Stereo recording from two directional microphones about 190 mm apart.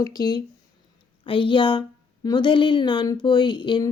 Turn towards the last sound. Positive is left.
turn(degrees=25)  # may be behind; listen again after turning